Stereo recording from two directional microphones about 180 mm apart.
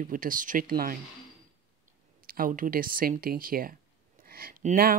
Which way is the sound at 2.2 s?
50° right (ahead or behind).